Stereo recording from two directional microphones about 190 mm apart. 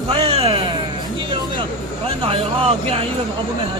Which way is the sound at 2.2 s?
30° right (ahead or behind).